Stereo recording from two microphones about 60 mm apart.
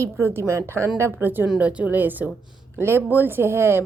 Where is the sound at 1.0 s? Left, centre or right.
Right.